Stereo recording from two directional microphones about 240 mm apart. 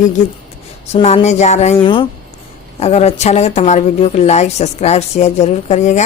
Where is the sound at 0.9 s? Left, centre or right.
Left.